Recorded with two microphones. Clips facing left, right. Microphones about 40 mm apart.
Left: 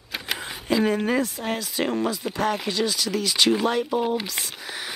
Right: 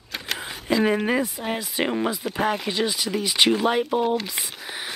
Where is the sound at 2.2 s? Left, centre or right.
Centre.